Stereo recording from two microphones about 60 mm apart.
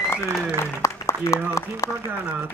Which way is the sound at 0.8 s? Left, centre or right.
Left.